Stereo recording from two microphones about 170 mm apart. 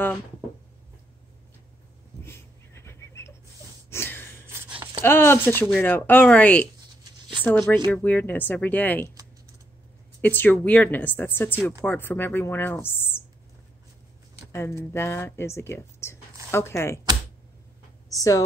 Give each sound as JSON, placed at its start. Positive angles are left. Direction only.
{"t": 2.2, "sound": "a sound", "side_deg": 15}
{"t": 5.0, "sound": "speech", "side_deg": 15}
{"t": 10.2, "sound": "speech", "side_deg": 10}
{"t": 14.5, "sound": "speech", "side_deg": 15}
{"t": 18.1, "sound": "speech", "side_deg": 20}